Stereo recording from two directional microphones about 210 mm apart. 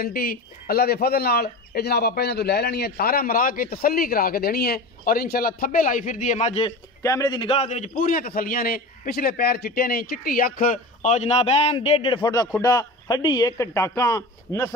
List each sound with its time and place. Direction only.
0.0 s a man's voice: 45° left (ahead or behind)
7.0 s a man's voice: 15° left (ahead or behind)